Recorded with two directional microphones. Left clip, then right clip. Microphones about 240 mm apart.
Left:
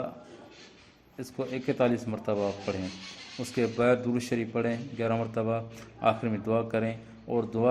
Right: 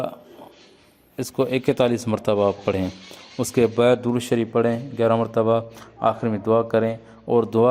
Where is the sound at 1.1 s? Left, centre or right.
Right.